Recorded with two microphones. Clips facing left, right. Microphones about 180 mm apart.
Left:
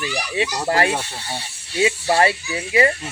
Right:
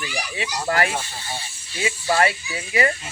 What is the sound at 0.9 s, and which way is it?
Speech, 70° left (ahead or behind).